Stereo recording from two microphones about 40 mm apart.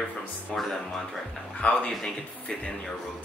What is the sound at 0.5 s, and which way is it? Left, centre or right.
Speech, centre.